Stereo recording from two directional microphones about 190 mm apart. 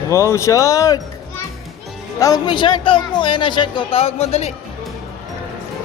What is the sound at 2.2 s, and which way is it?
Speech, 20° left (ahead or behind).